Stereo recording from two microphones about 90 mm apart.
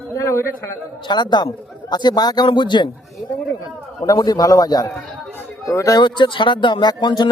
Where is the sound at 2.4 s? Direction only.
60° left (ahead or behind).